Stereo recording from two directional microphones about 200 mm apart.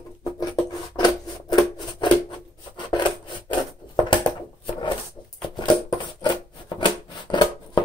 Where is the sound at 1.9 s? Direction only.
25° left (ahead or behind).